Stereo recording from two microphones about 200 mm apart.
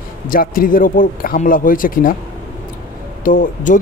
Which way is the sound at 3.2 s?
40° left (ahead or behind).